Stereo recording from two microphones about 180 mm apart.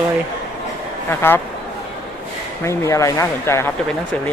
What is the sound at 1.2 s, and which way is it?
Speech, 10° left (ahead or behind).